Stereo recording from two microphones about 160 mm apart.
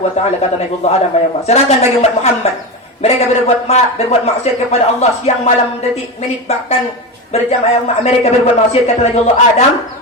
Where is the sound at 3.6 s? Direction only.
40° left (ahead or behind).